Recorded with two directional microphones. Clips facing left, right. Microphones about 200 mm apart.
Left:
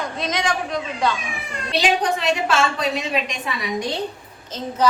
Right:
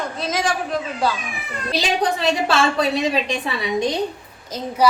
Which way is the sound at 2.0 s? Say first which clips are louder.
Right 2 dB; 35° right (ahead or behind).